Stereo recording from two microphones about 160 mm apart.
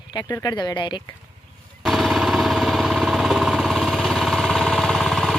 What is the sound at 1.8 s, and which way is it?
Jackhammer, centre (ahead or behind).